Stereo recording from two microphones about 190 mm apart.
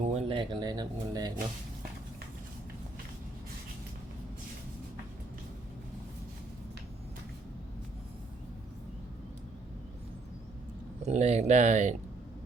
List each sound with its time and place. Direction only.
0.0 s speech: 35° right (ahead or behind)
11.0 s speech: 35° right (ahead or behind)